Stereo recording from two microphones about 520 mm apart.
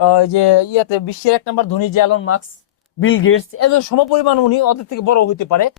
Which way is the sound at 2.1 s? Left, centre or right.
Left.